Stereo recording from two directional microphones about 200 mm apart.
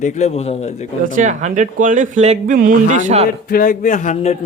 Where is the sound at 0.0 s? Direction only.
35° left (ahead or behind).